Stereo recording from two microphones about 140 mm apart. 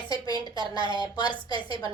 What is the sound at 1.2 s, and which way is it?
Speech, 30° left (ahead or behind).